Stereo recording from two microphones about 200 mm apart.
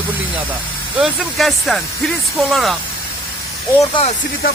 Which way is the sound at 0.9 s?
Centre (ahead or behind).